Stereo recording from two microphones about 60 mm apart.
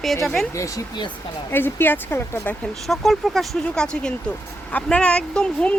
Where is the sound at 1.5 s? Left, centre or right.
Left.